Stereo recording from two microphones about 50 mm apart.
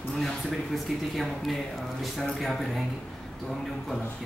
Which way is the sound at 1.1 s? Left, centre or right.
Centre.